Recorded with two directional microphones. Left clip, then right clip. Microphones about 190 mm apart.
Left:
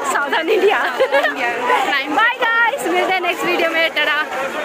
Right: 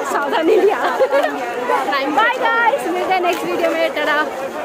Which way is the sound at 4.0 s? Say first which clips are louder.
Even; 25° right (ahead or behind).